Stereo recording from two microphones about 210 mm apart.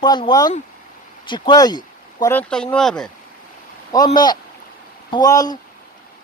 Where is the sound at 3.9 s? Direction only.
20° left (ahead or behind).